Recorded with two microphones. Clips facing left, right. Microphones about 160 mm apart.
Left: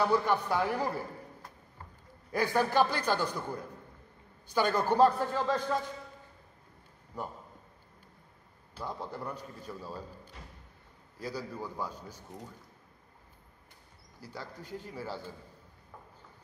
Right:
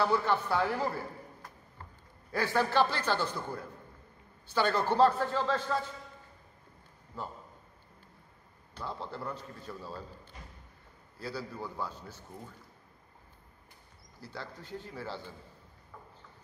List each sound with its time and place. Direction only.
0.0 s a man's voice: 15° left (ahead or behind)
2.3 s a man's voice: 15° left (ahead or behind)
7.1 s a man's voice: 15° left (ahead or behind)
8.7 s a man's voice: 15° left (ahead or behind)
11.1 s a man's voice: 15° left (ahead or behind)
14.2 s a man's voice: 10° left (ahead or behind)